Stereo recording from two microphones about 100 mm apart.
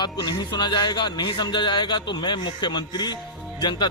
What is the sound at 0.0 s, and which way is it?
A man's voice, 45° left (ahead or behind).